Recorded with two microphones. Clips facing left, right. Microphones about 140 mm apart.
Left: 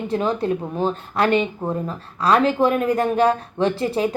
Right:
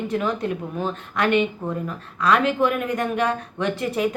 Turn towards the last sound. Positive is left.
turn(degrees=30)  # may be behind; listen again after turning